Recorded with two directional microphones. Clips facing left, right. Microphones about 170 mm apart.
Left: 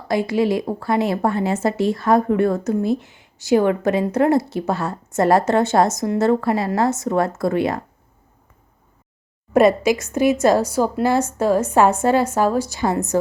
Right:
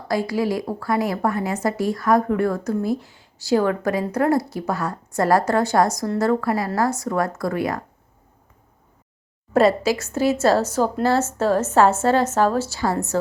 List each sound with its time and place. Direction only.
0.1 s a woman's voice: 20° left (ahead or behind)
9.5 s a woman's voice: 20° left (ahead or behind)